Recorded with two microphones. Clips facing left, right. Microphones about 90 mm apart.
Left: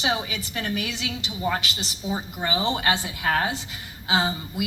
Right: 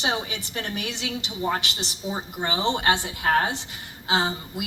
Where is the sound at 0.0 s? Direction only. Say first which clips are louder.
Left 1 dB; 40° right (ahead or behind).